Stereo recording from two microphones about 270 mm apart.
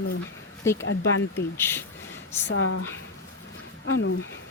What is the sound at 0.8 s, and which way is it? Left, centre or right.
Speech, left.